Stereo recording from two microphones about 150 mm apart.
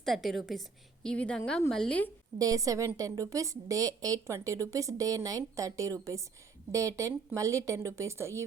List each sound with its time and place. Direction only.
0.0 s a woman's voice: centre (ahead or behind)
2.4 s a woman's voice: 25° right (ahead or behind)